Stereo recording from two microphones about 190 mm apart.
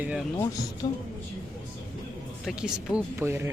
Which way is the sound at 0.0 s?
5° right (ahead or behind).